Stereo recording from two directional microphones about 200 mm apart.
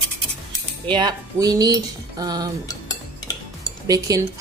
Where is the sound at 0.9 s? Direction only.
20° right (ahead or behind).